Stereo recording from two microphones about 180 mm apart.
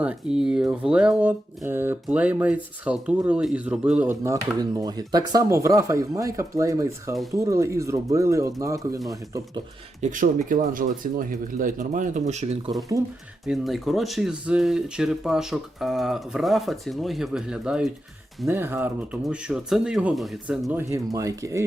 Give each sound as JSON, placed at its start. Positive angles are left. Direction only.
{"t": 0.0, "sound": "speech", "side_deg": -5}
{"t": 10.0, "sound": "speech", "side_deg": -45}
{"t": 13.4, "sound": "speech", "side_deg": 0}
{"t": 20.9, "sound": "speech", "side_deg": -20}